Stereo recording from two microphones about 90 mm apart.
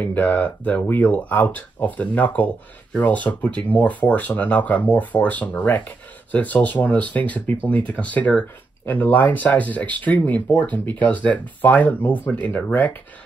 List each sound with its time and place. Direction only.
0.0 s speech: 20° left (ahead or behind)